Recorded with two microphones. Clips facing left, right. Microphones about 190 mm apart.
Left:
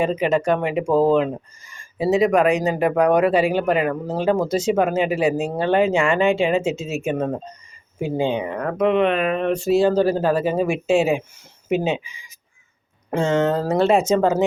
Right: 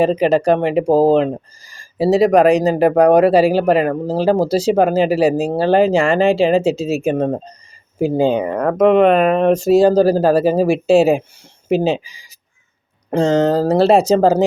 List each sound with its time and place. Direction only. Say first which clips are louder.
0.0 s speech: right 6 dB; 35° right (ahead or behind)